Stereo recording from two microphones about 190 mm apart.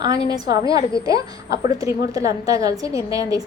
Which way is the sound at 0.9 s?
20° right (ahead or behind).